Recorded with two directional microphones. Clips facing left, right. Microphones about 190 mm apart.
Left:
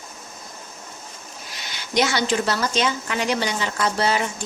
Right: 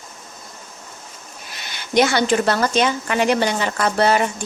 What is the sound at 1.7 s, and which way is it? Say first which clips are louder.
A woman's voice: right 5 dB; 55° right (ahead or behind).